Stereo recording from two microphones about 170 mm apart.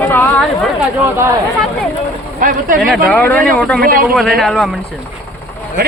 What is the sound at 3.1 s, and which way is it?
Speech, 10° left (ahead or behind).